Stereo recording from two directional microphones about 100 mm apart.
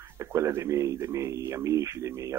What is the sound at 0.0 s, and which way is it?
Speech, 30° right (ahead or behind).